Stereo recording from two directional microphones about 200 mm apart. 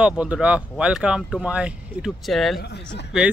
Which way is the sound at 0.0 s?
5° right (ahead or behind).